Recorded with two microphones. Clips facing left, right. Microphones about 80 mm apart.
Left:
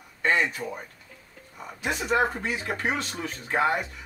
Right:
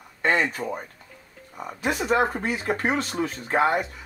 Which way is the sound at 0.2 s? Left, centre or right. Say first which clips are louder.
Right 2 dB; right.